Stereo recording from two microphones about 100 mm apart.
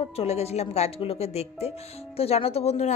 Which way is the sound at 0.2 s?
90° left.